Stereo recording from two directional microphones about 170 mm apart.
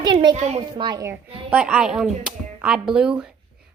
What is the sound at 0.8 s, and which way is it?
Speech, 25° right (ahead or behind).